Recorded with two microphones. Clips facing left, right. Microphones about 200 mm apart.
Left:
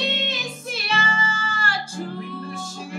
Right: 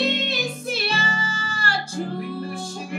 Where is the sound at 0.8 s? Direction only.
35° right (ahead or behind).